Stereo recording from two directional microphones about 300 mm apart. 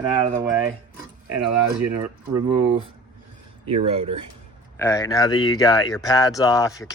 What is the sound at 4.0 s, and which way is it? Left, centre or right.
Speech, right.